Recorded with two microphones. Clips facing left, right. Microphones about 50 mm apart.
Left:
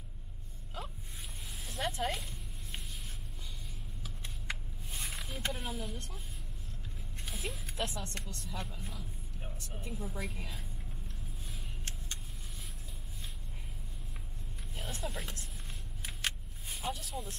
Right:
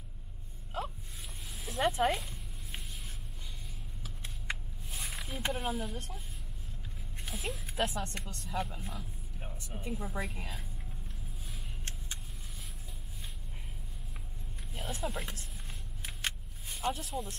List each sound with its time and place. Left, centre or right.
1.6 s speech: centre
4.0 s vehicle: centre
5.4 s speech: centre
7.2 s music: centre
7.7 s speech: centre
11.1 s vehicle: centre
14.9 s speech: centre
16.1 s vehicle: centre
17.1 s speech: centre